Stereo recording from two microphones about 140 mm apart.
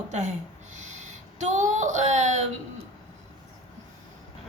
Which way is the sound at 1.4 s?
60° right (ahead or behind).